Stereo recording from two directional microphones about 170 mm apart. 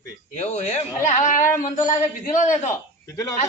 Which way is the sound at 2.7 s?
20° left (ahead or behind).